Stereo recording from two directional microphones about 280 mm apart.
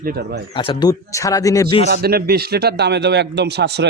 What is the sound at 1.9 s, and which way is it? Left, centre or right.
A man's voice, right.